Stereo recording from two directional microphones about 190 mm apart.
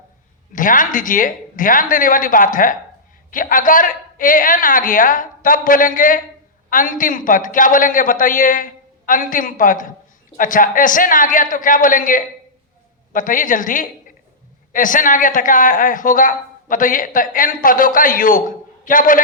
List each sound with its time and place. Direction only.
0.5 s speech: 45° left (ahead or behind)